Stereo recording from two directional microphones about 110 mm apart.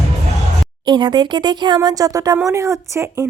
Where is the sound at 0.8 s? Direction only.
40° right (ahead or behind).